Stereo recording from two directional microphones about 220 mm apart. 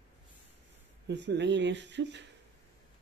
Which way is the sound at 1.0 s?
50° right (ahead or behind).